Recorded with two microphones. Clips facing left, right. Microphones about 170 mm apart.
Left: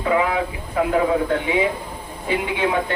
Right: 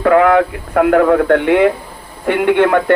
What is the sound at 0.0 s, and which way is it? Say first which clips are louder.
Speech: right 10 dB; 65° right (ahead or behind).